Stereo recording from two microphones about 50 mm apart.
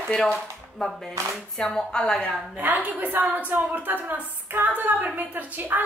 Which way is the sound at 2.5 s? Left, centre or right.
Right.